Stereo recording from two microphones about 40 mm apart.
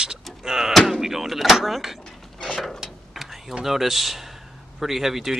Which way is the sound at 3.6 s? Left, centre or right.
Centre.